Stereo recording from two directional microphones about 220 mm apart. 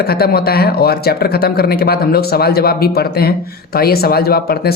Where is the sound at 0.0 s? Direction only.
45° left (ahead or behind).